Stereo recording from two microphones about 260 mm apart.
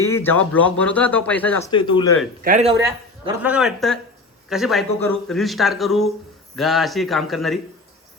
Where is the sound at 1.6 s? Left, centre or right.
Centre.